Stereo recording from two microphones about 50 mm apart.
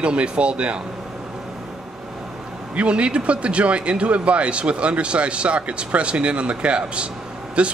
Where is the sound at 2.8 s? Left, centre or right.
Right.